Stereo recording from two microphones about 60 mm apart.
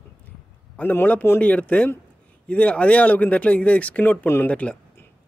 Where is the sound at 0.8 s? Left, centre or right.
Left.